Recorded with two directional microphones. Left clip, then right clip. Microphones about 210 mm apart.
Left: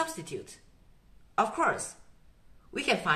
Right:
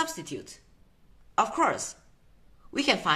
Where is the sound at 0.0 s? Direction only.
35° right (ahead or behind).